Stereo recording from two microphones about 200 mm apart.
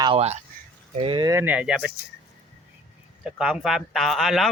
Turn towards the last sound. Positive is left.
turn(degrees=0)  # may be behind; listen again after turning